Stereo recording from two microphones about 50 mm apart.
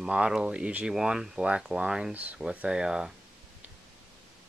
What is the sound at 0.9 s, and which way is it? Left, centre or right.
Speech, centre.